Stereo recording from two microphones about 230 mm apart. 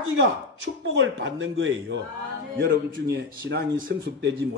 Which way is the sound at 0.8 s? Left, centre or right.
Right.